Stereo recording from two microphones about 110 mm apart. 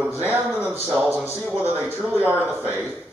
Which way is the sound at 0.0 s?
20° right (ahead or behind).